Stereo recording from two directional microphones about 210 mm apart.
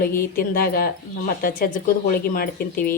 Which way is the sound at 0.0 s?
45° left (ahead or behind).